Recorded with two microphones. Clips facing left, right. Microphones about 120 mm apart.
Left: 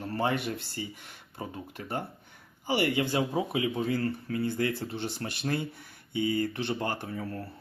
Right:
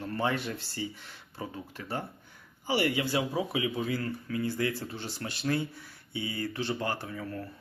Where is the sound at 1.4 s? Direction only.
30° left (ahead or behind).